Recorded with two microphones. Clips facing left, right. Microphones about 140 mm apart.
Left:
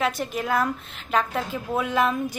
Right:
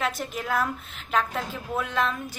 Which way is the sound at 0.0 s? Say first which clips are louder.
Left 4 dB; centre (ahead or behind).